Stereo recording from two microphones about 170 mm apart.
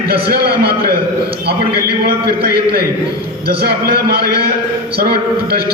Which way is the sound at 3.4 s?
65° right (ahead or behind).